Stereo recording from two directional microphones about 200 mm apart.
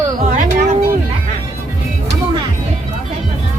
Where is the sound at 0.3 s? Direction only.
40° right (ahead or behind).